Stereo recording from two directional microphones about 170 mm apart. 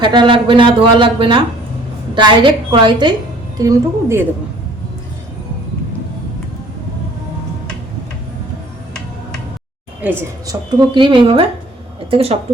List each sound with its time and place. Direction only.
0.0 s speech: 30° right (ahead or behind)
3.6 s a woman's voice: 15° right (ahead or behind)
10.0 s a woman's voice: 10° right (ahead or behind)
10.4 s speech: 20° right (ahead or behind)